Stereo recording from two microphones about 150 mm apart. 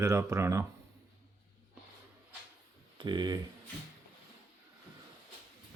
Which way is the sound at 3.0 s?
30° right (ahead or behind).